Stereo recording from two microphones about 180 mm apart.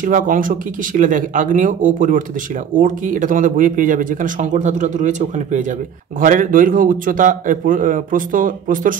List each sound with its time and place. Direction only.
0.0 s speech: 50° right (ahead or behind)